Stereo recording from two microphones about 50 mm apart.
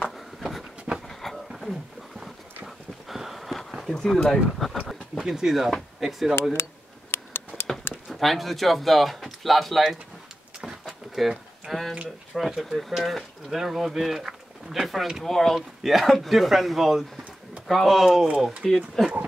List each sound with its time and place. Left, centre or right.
0.0 s a sound: centre
2.6 s horse: centre
3.9 s speech: centre
5.1 s speech: centre
6.5 s a sound: left
8.2 s speech: centre
10.6 s door: centre
12.4 s speech: centre
18.6 s speech: centre